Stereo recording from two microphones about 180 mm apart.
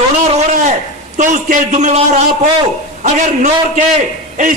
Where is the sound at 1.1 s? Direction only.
45° right (ahead or behind).